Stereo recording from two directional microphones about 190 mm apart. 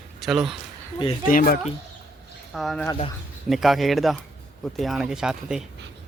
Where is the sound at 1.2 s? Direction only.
45° left (ahead or behind).